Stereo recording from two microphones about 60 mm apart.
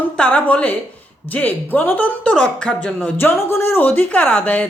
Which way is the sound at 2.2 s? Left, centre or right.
Centre.